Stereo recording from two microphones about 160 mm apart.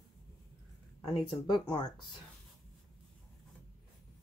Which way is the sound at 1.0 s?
25° left (ahead or behind).